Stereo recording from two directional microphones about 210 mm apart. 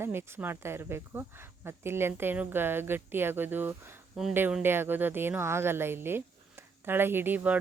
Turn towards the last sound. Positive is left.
turn(degrees=-10)  # may be behind; listen again after turning